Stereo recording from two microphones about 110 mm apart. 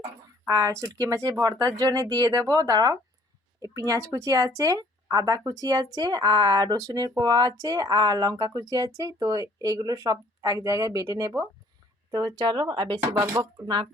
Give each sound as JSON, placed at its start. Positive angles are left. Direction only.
{"t": 0.4, "sound": "speech", "side_deg": -30}
{"t": 13.0, "sound": "speech", "side_deg": -20}
{"t": 13.3, "sound": "speech", "side_deg": -40}